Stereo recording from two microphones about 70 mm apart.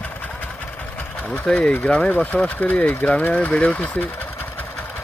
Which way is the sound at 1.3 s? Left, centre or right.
Centre.